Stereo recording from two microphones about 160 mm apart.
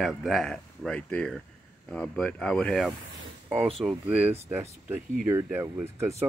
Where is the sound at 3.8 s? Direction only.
10° right (ahead or behind).